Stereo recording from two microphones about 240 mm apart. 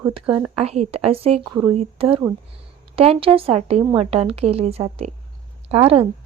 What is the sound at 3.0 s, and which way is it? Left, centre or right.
A woman's voice, right.